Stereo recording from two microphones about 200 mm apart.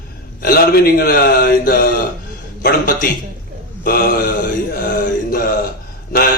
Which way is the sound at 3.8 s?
45° left (ahead or behind).